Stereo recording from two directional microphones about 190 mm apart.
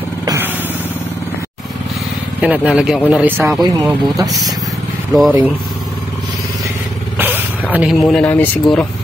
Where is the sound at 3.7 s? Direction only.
20° right (ahead or behind).